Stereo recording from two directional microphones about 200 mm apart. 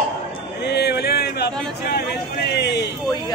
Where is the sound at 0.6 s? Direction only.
55° left (ahead or behind).